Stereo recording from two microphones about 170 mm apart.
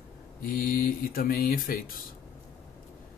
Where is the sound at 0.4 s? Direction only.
60° left (ahead or behind).